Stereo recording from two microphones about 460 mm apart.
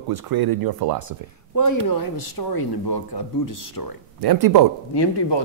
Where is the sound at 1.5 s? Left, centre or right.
Left.